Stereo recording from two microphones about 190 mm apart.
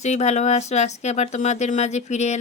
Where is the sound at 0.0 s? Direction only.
35° left (ahead or behind).